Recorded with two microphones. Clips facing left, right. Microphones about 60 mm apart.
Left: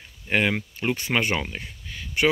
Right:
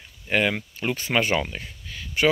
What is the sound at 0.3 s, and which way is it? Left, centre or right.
Speech, left.